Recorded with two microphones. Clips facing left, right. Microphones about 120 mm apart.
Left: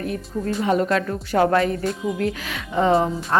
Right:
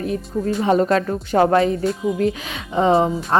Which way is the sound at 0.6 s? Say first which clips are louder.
Right 3 dB; 30° right (ahead or behind).